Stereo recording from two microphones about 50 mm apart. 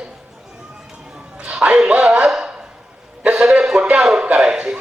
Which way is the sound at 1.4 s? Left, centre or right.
Right.